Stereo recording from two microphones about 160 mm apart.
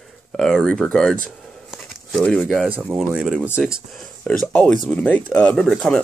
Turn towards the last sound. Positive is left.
turn(degrees=0)  # may be behind; listen again after turning